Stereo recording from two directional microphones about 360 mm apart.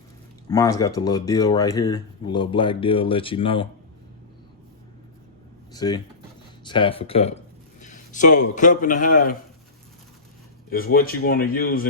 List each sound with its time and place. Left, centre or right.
0.4 s speech: centre
5.7 s a man's voice: centre
10.7 s speech: left